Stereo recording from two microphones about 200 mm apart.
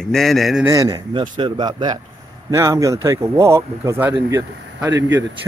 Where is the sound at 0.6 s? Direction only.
15° right (ahead or behind).